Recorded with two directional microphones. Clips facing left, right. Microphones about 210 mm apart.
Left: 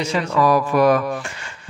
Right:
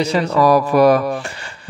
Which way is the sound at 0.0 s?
35° right (ahead or behind).